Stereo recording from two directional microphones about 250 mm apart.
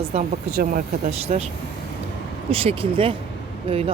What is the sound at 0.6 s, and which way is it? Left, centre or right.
Speech, right.